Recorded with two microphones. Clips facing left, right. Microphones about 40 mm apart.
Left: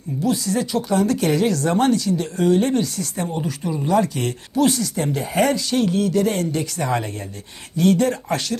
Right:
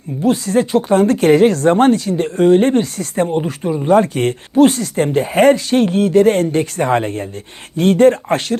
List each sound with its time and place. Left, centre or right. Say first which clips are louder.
0.2 s speech: right 7 dB; right